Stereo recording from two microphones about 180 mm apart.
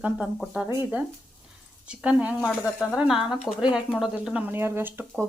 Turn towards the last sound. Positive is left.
turn(degrees=-10)  # may be behind; listen again after turning